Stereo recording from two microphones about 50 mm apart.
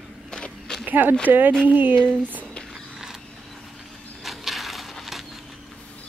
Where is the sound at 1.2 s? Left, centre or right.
Right.